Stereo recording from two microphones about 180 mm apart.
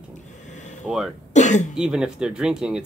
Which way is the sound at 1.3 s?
40° left (ahead or behind).